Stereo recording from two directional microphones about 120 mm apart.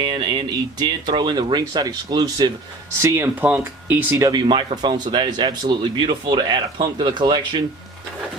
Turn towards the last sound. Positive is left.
turn(degrees=-40)  # may be behind; listen again after turning